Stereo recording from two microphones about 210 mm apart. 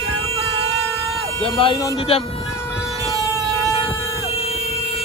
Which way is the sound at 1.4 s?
25° left (ahead or behind).